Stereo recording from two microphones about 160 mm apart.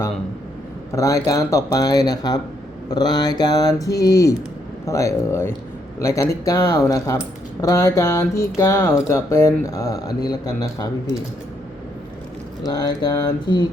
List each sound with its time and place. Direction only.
0.9 s speech: 20° left (ahead or behind)
12.6 s speech: 25° left (ahead or behind)